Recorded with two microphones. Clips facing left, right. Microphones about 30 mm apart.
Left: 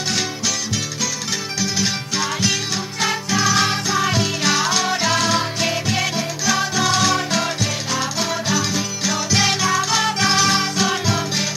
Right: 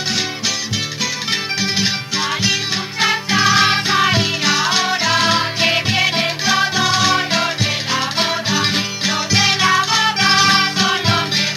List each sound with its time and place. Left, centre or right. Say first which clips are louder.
1.6 s music: right 3 dB; right